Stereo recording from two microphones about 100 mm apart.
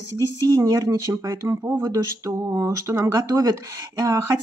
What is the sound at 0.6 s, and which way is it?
Speech, 35° right (ahead or behind).